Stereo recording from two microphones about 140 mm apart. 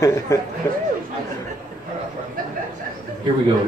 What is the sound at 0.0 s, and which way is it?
Speech, 25° left (ahead or behind).